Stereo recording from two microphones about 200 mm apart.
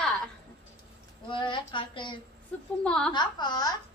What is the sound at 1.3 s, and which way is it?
Speech, 25° left (ahead or behind).